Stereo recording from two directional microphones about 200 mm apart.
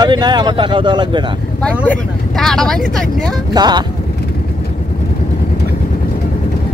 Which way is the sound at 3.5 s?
20° right (ahead or behind).